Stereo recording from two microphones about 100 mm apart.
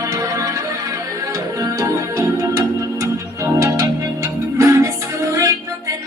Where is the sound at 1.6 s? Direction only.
35° right (ahead or behind).